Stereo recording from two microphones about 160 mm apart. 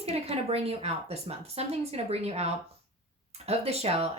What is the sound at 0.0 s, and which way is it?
A woman's voice, 40° right (ahead or behind).